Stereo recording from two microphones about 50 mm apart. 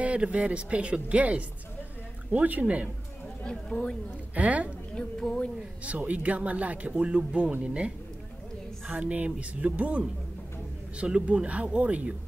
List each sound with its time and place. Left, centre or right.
0.0 s speech: right
3.4 s speech: centre
4.4 s speech: right
4.9 s speech: centre
5.9 s speech: right
8.9 s speech: right